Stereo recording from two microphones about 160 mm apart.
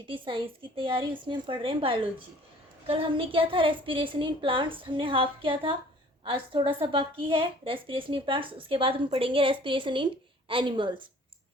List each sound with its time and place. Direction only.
0.1 s a woman's voice: 30° right (ahead or behind)